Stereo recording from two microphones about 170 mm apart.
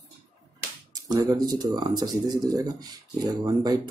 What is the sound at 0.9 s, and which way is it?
Speech, 20° right (ahead or behind).